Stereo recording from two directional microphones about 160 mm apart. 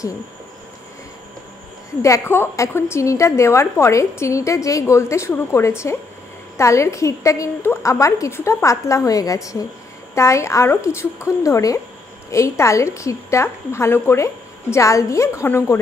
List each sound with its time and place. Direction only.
2.0 s a woman's voice: 20° left (ahead or behind)